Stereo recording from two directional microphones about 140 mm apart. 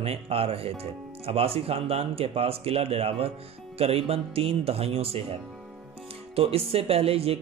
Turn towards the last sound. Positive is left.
turn(degrees=-45)  # may be behind; listen again after turning